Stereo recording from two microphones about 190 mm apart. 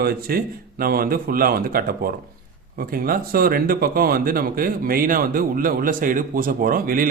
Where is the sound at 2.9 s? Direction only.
50° right (ahead or behind).